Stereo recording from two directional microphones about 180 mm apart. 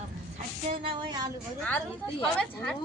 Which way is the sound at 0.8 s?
25° right (ahead or behind).